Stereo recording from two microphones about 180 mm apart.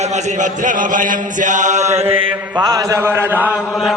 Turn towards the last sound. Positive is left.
turn(degrees=-10)  # may be behind; listen again after turning